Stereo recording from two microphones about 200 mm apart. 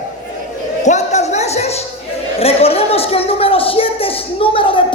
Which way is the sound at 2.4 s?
30° left (ahead or behind).